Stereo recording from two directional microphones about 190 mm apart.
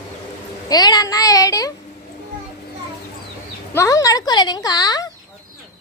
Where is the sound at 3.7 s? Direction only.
15° left (ahead or behind).